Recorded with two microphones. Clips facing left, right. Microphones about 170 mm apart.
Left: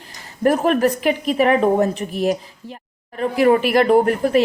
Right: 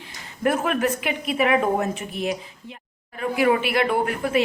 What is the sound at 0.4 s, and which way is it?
Speech, 35° left (ahead or behind).